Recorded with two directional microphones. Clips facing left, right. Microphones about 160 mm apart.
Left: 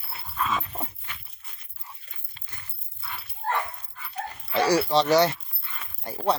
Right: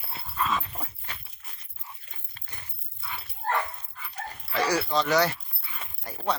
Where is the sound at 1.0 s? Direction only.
35° right (ahead or behind).